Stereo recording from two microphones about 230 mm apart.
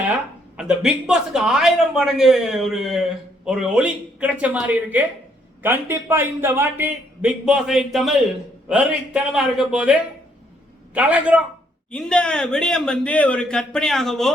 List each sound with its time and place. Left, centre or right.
0.1 s speech: centre